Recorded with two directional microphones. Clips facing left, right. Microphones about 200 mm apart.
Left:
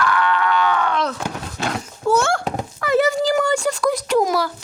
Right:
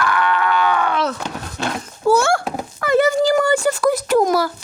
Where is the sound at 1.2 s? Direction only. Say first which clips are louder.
Even; 5° left (ahead or behind).